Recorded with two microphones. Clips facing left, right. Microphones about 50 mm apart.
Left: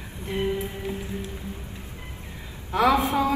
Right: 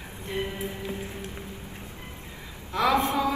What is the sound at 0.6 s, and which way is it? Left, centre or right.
Music, right.